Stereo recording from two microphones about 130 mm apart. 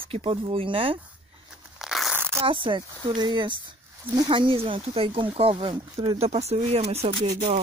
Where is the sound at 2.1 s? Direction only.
20° right (ahead or behind).